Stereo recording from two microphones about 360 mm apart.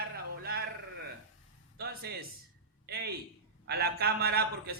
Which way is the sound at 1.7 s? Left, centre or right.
Right.